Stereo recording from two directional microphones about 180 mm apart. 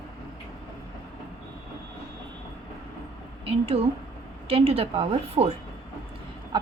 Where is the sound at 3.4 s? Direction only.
30° right (ahead or behind).